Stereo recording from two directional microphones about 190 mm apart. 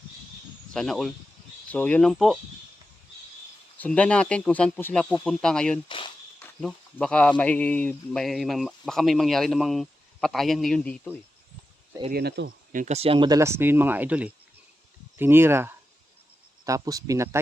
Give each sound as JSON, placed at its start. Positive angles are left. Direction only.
{"t": 0.7, "sound": "speech", "side_deg": 5}
{"t": 3.8, "sound": "speech", "side_deg": 5}
{"t": 12.1, "sound": "speech", "side_deg": -55}